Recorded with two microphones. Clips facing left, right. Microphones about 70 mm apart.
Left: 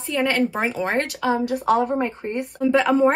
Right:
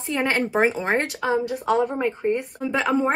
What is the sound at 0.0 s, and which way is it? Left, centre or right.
Speech, right.